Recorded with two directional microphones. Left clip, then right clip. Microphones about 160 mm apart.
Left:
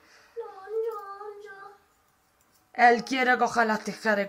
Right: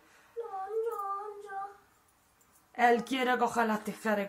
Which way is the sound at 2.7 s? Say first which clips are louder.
Left 6 dB; 15° left (ahead or behind).